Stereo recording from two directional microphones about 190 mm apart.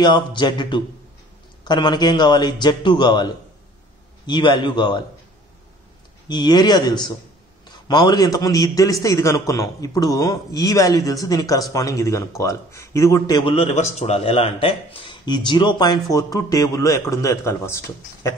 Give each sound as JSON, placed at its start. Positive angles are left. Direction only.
{"t": 0.0, "sound": "a man's voice", "side_deg": 25}
{"t": 6.2, "sound": "a man's voice", "side_deg": 20}